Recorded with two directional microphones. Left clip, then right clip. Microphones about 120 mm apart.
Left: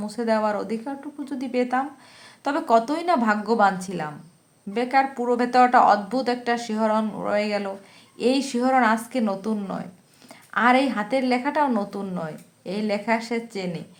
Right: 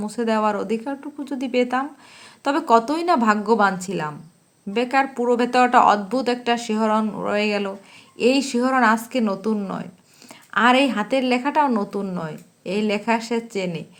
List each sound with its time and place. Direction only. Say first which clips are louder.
0.0 s a woman's voice: right 2 dB; 30° right (ahead or behind)